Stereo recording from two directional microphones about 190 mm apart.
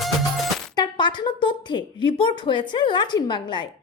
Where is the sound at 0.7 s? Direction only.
25° left (ahead or behind).